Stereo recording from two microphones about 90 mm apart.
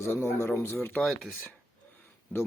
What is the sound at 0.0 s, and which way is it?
Speech, 30° left (ahead or behind).